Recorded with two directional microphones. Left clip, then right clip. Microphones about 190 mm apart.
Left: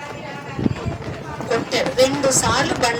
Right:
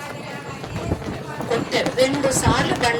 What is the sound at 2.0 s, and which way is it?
Speech, 40° left (ahead or behind).